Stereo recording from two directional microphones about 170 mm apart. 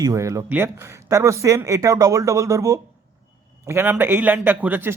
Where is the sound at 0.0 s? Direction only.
20° right (ahead or behind).